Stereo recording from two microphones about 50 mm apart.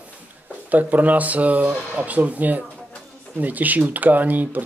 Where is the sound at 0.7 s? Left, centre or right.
Right.